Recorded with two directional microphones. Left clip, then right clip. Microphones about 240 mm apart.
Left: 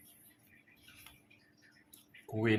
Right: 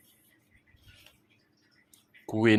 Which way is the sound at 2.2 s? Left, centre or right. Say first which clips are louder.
Right 9 dB; right.